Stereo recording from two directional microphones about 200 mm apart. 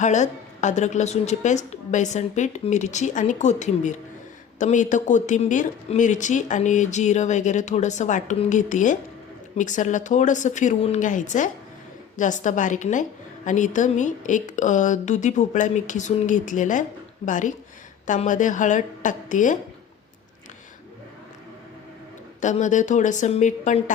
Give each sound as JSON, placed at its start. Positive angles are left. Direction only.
{"t": 0.0, "sound": "a woman's voice", "side_deg": 35}
{"t": 22.4, "sound": "a woman's voice", "side_deg": 40}